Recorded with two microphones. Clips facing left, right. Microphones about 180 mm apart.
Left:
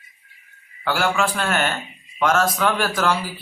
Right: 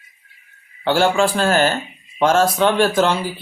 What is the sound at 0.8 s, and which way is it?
Speech, 30° right (ahead or behind).